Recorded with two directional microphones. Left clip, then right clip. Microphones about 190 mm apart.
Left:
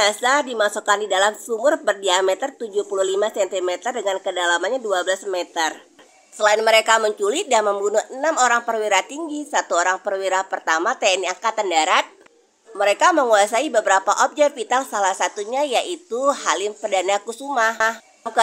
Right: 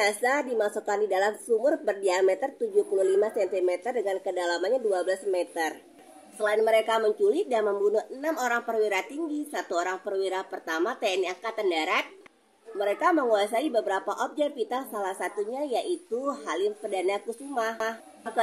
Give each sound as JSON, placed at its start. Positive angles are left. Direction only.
{"t": 0.0, "sound": "a woman's voice", "side_deg": 20}